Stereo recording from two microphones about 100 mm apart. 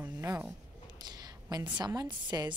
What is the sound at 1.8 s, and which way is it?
Speech, 45° right (ahead or behind).